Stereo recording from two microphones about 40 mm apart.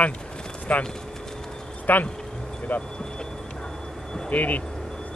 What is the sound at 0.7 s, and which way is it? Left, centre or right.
Speech, left.